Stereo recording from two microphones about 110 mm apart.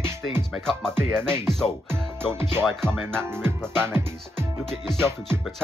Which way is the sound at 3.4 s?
20° right (ahead or behind).